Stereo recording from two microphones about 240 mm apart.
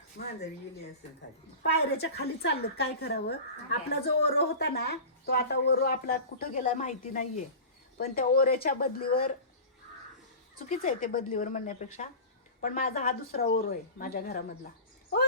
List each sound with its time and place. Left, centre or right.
0.2 s a woman's voice: left
1.7 s a woman's voice: left
10.5 s a woman's voice: left